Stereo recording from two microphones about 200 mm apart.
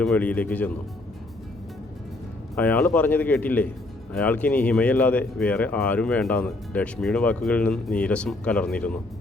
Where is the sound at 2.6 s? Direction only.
10° left (ahead or behind).